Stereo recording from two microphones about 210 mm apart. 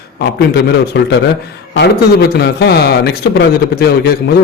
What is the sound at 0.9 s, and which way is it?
A man's voice, 50° left (ahead or behind).